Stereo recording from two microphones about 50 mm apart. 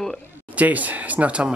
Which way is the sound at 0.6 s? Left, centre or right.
Right.